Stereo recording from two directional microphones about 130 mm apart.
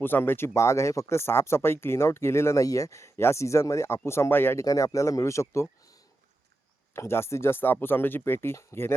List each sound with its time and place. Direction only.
0.0 s speech: 15° left (ahead or behind)
6.9 s speech: 20° left (ahead or behind)